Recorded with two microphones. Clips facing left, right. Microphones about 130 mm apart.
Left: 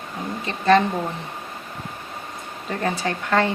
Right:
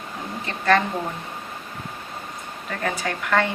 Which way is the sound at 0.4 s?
20° left (ahead or behind).